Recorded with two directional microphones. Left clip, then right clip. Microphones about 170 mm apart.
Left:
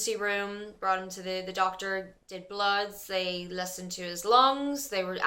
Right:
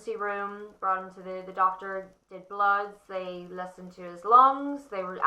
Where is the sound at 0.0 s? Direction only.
15° left (ahead or behind).